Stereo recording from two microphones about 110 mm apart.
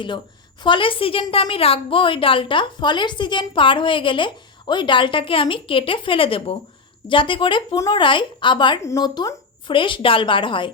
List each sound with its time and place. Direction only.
0.6 s a woman's voice: 50° left (ahead or behind)
8.8 s a woman's voice: 25° left (ahead or behind)
9.0 s a woman's voice: 40° left (ahead or behind)